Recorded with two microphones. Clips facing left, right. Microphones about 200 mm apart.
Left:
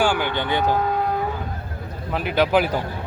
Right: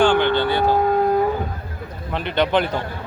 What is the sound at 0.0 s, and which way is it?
Speech, 10° left (ahead or behind).